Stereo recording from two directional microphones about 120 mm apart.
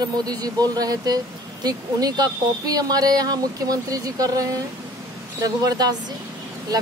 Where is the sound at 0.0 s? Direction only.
35° right (ahead or behind).